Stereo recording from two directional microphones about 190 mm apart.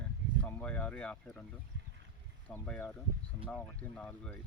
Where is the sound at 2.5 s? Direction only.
10° left (ahead or behind).